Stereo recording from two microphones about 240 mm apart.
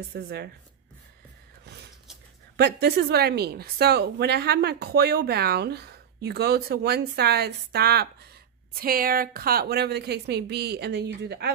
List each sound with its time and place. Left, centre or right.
0.1 s a woman's voice: right
2.5 s a woman's voice: right